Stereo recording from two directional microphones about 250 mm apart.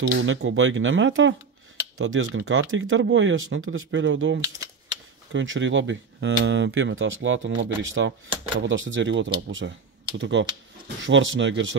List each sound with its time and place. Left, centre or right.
0.1 s speech: right